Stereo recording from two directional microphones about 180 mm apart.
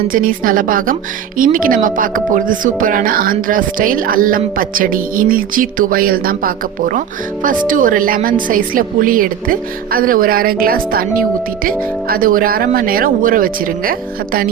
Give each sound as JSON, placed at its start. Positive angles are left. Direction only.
{"t": 0.1, "sound": "speech", "side_deg": -50}